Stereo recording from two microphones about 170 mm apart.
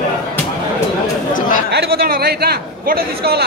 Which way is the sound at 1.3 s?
50° left (ahead or behind).